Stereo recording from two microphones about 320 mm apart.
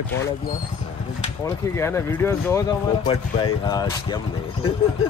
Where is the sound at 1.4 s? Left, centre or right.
Centre.